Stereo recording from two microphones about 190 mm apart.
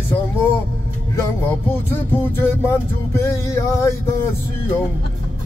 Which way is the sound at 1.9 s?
10° left (ahead or behind).